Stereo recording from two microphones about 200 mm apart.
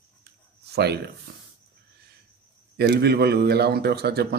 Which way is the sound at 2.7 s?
55° right (ahead or behind).